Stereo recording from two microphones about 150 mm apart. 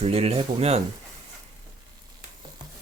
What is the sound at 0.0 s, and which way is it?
Speech, 40° right (ahead or behind).